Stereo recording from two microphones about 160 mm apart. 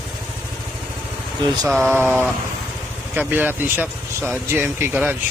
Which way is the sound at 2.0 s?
10° right (ahead or behind).